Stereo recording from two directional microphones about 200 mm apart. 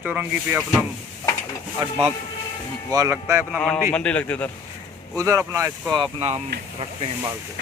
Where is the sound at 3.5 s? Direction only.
5° left (ahead or behind).